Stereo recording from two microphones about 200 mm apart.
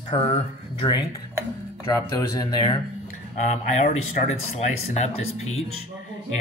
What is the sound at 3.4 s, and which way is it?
Speech, 35° left (ahead or behind).